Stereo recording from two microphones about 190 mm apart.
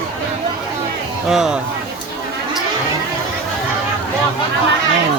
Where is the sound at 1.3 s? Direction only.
5° right (ahead or behind).